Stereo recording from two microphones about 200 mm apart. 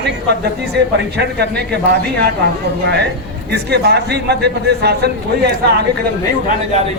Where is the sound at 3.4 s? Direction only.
55° right (ahead or behind).